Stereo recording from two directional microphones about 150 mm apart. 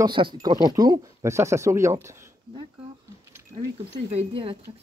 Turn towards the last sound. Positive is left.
turn(degrees=-35)  # may be behind; listen again after turning